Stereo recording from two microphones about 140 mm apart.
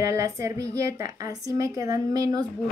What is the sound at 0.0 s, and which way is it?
Speech, 25° right (ahead or behind).